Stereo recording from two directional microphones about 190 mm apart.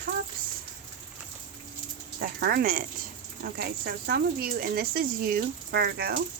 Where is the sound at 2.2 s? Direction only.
55° right (ahead or behind).